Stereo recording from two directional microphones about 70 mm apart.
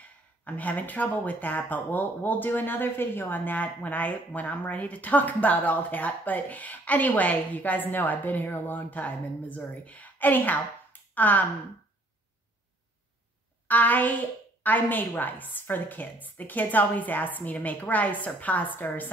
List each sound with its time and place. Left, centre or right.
0.5 s speech: left
13.7 s speech: left